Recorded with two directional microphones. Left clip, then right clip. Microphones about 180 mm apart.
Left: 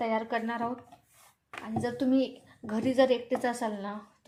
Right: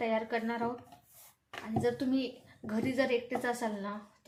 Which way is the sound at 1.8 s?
30° left (ahead or behind).